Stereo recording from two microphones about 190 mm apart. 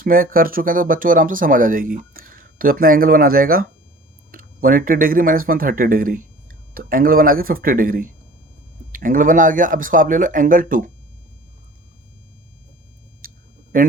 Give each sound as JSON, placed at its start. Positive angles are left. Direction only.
{"t": 0.0, "sound": "speech", "side_deg": -50}
{"t": 13.2, "sound": "a sound", "side_deg": -50}
{"t": 13.7, "sound": "speech", "side_deg": -45}